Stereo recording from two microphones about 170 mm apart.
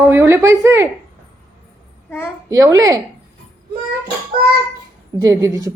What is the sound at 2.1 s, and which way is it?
Speech, 15° left (ahead or behind).